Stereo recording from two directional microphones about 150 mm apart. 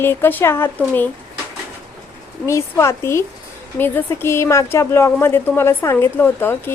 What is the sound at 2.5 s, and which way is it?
A woman's voice, 20° left (ahead or behind).